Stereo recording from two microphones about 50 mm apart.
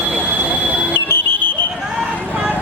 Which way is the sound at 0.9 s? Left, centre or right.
Left.